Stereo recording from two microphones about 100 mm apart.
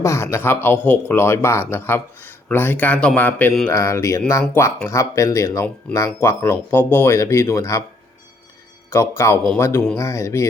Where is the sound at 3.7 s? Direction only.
30° left (ahead or behind).